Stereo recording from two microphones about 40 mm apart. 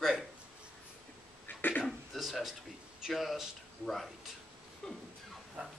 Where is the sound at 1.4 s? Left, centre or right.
Left.